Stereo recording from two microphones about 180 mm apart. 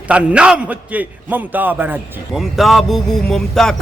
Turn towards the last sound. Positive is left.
turn(degrees=0)  # may be behind; listen again after turning